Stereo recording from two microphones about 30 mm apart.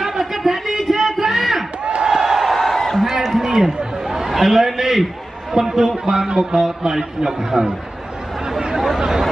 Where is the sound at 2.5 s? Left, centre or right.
Centre.